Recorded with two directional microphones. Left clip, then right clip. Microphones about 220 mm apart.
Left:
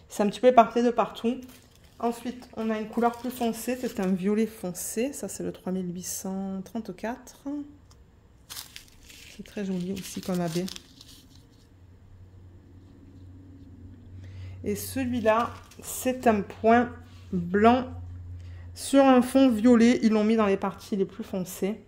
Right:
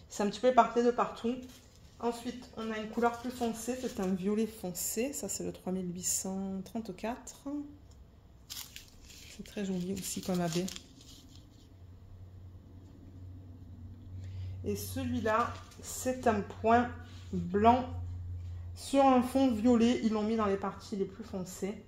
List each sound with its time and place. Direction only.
0.1 s a woman's voice: 55° left (ahead or behind); by 7.5 s 25° left (ahead or behind)
9.5 s speech: 25° left (ahead or behind)
10.0 s speech: 10° left (ahead or behind)
14.6 s speech: 45° left (ahead or behind)
18.8 s speech: 40° left (ahead or behind); by 21.7 s 55° left (ahead or behind)